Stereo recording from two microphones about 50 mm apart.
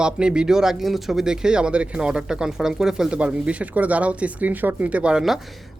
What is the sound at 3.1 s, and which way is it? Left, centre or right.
Speech, right.